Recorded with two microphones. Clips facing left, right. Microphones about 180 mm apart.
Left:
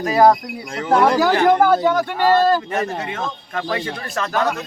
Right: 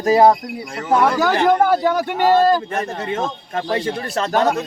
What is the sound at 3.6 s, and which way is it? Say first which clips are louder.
Speech: right 3 dB; 30° right (ahead or behind).